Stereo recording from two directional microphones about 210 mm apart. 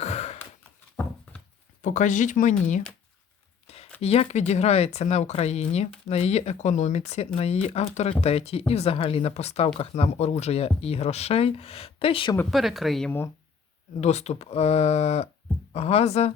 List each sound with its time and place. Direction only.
0.0 s a sound: 30° left (ahead or behind)
1.8 s speech: 35° left (ahead or behind)
3.7 s a sound: 30° left (ahead or behind)
4.0 s speech: 30° left (ahead or behind)
12.4 s speech: centre (ahead or behind)
14.0 s speech: 30° left (ahead or behind)